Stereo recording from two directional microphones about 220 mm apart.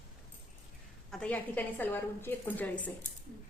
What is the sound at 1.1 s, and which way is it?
A woman's voice, 5° left (ahead or behind).